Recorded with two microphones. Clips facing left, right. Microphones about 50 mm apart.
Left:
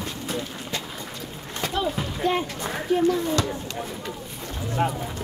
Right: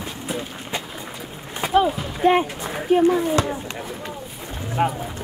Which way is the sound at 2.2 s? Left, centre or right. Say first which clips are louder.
Right 7 dB; right.